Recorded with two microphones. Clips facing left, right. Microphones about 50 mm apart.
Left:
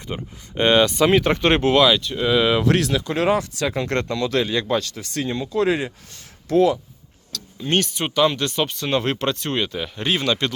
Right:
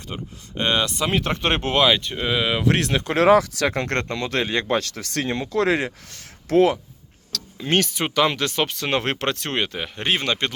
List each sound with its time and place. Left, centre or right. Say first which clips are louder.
0.1 s speech: left 3 dB; centre
1.7 s speech: left 2 dB; right; by 2.7 s centre
2.7 s speech: left 2 dB; right
3.0 s speech: right 4 dB; right
4.1 s speech: left 2 dB; right
4.8 s speech: even; right